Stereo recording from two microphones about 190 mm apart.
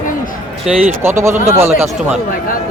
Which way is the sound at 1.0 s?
15° right (ahead or behind).